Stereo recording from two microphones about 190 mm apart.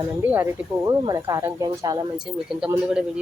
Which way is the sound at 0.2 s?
10° right (ahead or behind).